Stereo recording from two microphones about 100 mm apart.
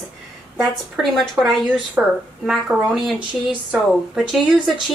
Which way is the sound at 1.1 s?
5° left (ahead or behind).